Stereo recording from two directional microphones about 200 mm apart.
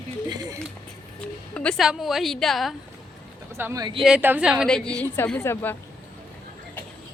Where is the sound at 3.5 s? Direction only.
15° right (ahead or behind).